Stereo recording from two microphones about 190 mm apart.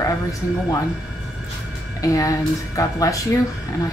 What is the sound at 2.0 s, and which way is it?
A woman's voice, 15° left (ahead or behind).